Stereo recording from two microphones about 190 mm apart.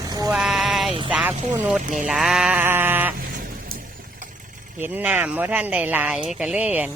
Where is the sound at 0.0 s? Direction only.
20° right (ahead or behind).